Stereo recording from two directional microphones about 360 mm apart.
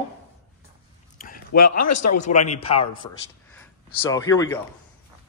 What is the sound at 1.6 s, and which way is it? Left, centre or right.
Speech, left.